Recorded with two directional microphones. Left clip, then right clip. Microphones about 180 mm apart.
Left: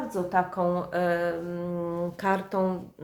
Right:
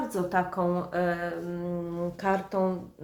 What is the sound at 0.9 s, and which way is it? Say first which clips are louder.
Speech: left 3 dB; 25° left (ahead or behind).